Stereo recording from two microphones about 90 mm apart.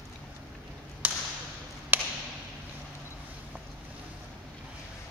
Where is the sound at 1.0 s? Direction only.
20° right (ahead or behind).